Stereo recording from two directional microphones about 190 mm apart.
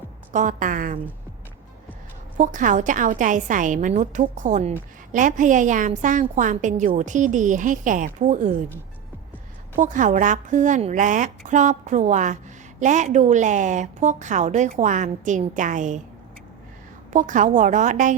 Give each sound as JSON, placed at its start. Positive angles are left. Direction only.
{"t": 0.3, "sound": "a woman's voice", "side_deg": -45}
{"t": 2.4, "sound": "a woman's voice", "side_deg": -45}
{"t": 9.7, "sound": "a woman's voice", "side_deg": -40}
{"t": 17.1, "sound": "a woman's voice", "side_deg": -40}